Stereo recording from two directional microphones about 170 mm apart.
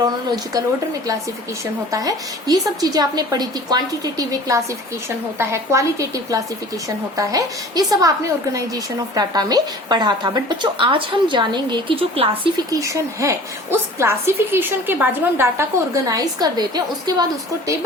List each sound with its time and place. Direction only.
0.0 s a woman's voice: 25° right (ahead or behind)
1.9 s a woman's voice: 20° right (ahead or behind)
12.3 s a woman's voice: 20° right (ahead or behind)